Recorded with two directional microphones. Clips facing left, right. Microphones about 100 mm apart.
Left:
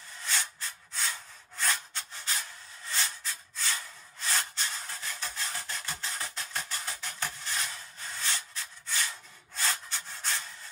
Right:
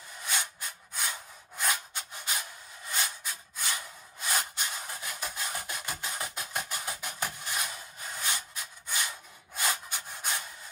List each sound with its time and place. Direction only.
0.2 s rub: 15° right (ahead or behind)